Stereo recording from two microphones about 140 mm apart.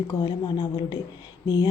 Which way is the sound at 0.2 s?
30° left (ahead or behind).